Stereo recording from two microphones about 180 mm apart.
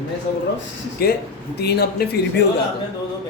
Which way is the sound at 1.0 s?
60° left (ahead or behind).